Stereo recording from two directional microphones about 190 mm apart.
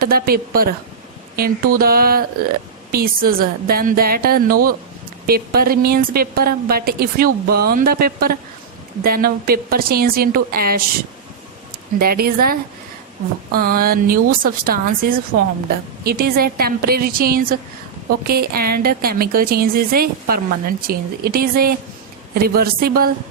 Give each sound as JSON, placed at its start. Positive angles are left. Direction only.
{"t": 0.0, "sound": "a woman's voice", "side_deg": -50}
{"t": 11.9, "sound": "a woman's voice", "side_deg": -50}
{"t": 15.3, "sound": "a woman's voice", "side_deg": -65}
{"t": 16.0, "sound": "a woman's voice", "side_deg": -55}